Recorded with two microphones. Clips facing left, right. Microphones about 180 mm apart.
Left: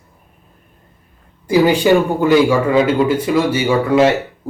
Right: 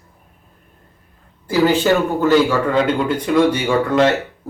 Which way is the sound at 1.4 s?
15° left (ahead or behind).